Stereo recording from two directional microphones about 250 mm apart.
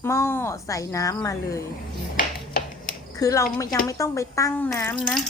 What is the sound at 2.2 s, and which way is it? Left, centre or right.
Finger snapping, left.